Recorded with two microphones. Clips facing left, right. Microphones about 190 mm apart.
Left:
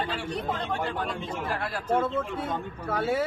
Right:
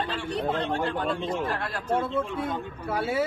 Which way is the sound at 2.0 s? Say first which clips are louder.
Right 1 dB; 10° right (ahead or behind).